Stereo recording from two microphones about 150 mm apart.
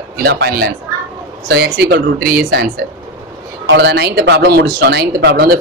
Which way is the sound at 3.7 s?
90° right.